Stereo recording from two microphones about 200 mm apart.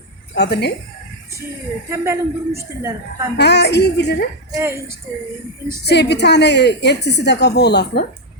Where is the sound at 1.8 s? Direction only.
15° right (ahead or behind).